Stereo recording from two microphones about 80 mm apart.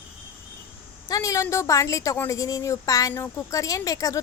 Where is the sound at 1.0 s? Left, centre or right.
Left.